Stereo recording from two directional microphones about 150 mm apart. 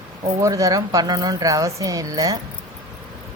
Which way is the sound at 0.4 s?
20° right (ahead or behind).